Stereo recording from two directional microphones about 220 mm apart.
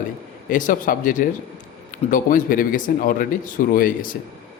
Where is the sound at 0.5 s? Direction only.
35° left (ahead or behind).